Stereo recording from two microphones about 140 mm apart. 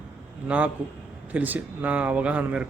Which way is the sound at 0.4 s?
10° right (ahead or behind).